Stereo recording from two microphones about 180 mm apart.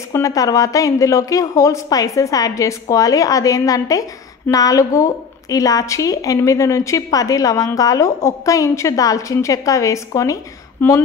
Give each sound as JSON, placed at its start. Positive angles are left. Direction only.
{"t": 0.1, "sound": "a woman's voice", "side_deg": 20}